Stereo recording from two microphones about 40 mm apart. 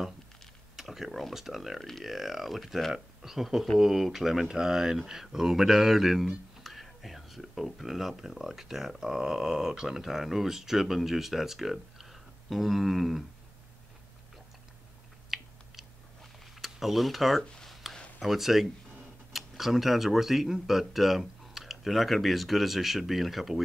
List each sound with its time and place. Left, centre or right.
0.7 s computer keyboard: centre
1.3 s speech: centre
1.8 s speech: centre
2.0 s speech: centre
15.3 s a sound: centre
16.6 s speech: centre
17.8 s a sound: centre
18.2 s speech: centre